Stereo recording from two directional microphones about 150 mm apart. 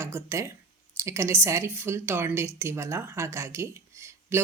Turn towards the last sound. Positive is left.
turn(degrees=-15)  # may be behind; listen again after turning